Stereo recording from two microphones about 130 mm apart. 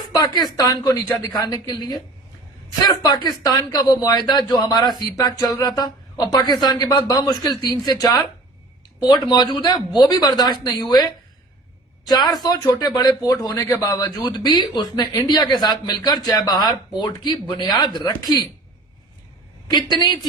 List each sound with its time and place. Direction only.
0.2 s speech: 30° left (ahead or behind)
5.5 s a sound: 30° left (ahead or behind)
6.3 s speech: 35° left (ahead or behind)
12.3 s speech: 30° left (ahead or behind)